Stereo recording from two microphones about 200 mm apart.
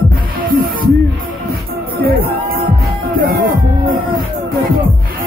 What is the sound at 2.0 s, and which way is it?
Music, 50° right (ahead or behind).